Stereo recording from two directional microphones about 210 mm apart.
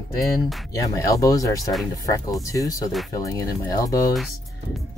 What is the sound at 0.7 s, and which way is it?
Speech, 15° left (ahead or behind).